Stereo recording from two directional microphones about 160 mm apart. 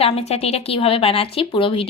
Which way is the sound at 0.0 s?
40° left (ahead or behind).